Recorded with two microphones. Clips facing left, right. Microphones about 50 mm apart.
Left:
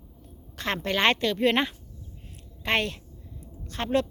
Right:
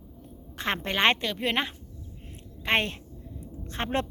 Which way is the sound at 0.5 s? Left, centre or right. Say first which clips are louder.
Left 1 dB; centre.